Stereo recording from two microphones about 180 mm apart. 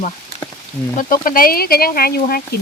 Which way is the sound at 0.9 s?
50° left (ahead or behind).